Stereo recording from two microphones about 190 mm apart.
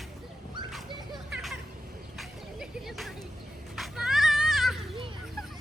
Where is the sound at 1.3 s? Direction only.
Centre (ahead or behind).